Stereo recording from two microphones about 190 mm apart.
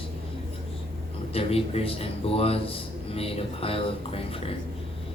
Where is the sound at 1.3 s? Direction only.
30° left (ahead or behind).